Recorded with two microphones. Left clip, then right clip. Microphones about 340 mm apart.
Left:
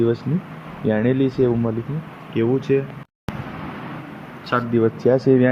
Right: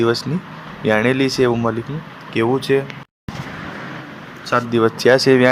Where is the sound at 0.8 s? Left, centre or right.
Right.